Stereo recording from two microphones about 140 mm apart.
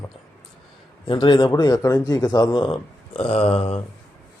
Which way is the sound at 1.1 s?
35° left (ahead or behind).